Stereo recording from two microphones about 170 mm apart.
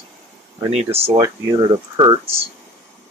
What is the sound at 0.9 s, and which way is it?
Speech, 15° right (ahead or behind).